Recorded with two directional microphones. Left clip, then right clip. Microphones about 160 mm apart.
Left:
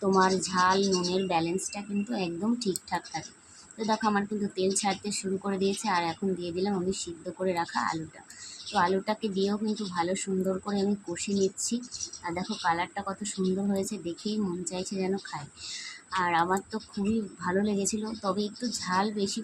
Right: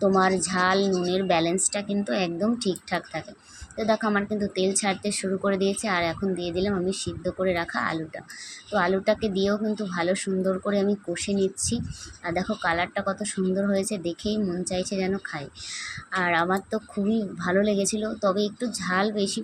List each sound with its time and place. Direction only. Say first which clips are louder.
0.1 s a woman's voice: right 2 dB; 20° right (ahead or behind)